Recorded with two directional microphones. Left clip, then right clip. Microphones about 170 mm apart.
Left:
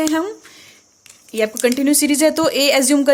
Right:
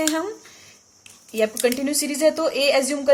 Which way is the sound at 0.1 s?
30° left (ahead or behind).